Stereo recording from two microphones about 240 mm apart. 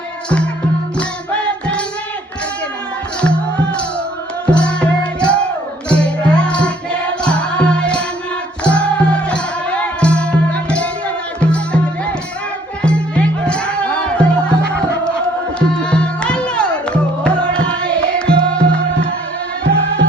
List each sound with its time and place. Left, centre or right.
0.9 s music: centre
3.2 s music: centre
12.8 s music: centre
15.5 s music: centre
19.6 s music: right